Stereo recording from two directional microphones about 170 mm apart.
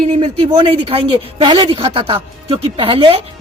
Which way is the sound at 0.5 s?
25° right (ahead or behind).